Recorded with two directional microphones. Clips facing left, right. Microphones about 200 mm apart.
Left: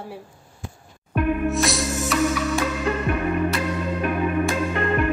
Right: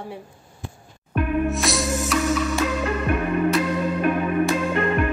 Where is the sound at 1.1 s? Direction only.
Centre (ahead or behind).